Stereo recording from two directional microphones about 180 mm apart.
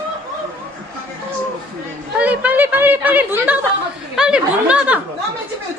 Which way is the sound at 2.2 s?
10° right (ahead or behind).